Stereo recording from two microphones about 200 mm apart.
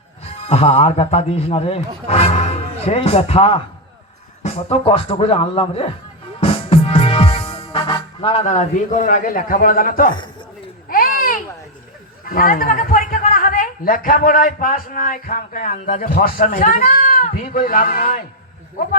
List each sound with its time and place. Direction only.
0.4 s speech: 30° left (ahead or behind)
6.4 s music: 30° left (ahead or behind)
10.8 s a sound: 45° left (ahead or behind)
12.3 s speech: 45° left (ahead or behind)